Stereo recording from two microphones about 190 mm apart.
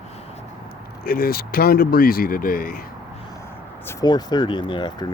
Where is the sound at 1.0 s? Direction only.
50° left (ahead or behind).